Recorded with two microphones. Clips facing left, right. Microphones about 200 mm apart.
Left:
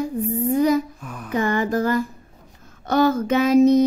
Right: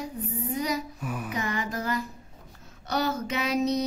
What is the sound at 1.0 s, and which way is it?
Female singing, 5° right (ahead or behind).